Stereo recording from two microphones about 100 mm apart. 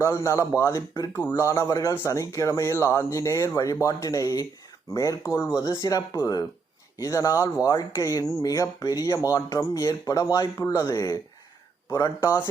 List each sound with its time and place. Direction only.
0.0 s a man's voice: 30° left (ahead or behind)
1.5 s a man's voice: 35° left (ahead or behind)